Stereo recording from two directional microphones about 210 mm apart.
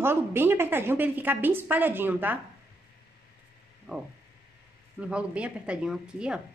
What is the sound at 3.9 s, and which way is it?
Speech, centre (ahead or behind).